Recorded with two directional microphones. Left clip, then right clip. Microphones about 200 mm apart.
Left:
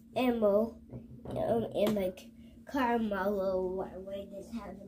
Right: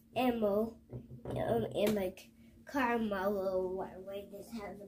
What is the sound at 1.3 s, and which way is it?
A woman's voice, 15° right (ahead or behind).